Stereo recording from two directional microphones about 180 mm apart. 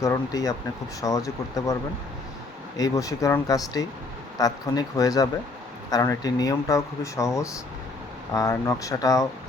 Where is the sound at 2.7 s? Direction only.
20° left (ahead or behind).